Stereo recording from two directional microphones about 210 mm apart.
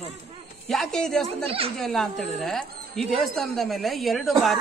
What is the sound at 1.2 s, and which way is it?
Speech, 25° right (ahead or behind).